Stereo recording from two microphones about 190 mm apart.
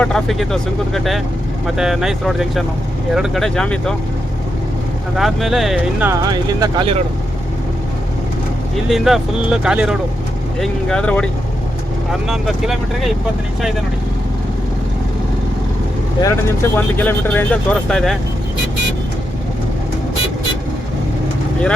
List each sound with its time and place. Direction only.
0.0 s speech: centre (ahead or behind)
5.1 s speech: centre (ahead or behind)
6.2 s speech: 20° right (ahead or behind)
8.7 s speech: centre (ahead or behind)
12.3 s speech: centre (ahead or behind)
16.2 s speech: 10° left (ahead or behind)